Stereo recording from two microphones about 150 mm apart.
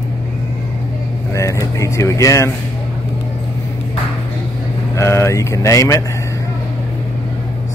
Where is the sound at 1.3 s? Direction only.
20° left (ahead or behind).